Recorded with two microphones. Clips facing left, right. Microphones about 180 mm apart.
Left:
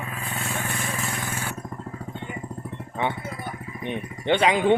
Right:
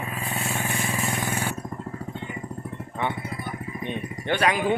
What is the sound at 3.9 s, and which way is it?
Vehicle, 20° left (ahead or behind).